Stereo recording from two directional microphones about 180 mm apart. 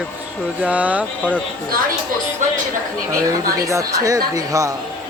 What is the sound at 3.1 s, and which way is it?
Speech, 15° right (ahead or behind).